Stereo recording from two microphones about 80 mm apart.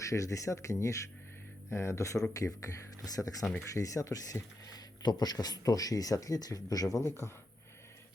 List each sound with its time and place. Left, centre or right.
0.0 s speech: left